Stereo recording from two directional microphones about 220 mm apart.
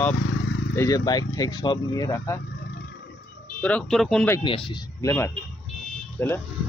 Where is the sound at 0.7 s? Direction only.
15° left (ahead or behind).